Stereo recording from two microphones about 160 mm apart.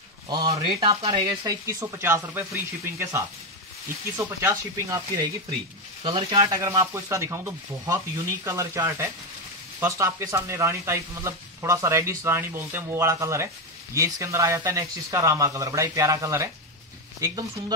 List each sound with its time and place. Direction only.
0.3 s speech: 30° right (ahead or behind)
4.4 s speech: 20° right (ahead or behind)
6.0 s speech: 30° right (ahead or behind)
6.4 s speech: 20° right (ahead or behind)